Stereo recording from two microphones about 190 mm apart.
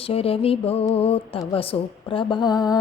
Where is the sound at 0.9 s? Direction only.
30° left (ahead or behind).